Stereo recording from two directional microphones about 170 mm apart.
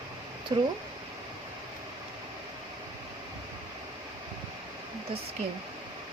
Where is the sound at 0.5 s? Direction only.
30° right (ahead or behind).